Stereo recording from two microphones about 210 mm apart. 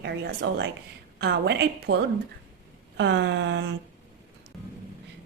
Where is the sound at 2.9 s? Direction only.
55° right (ahead or behind).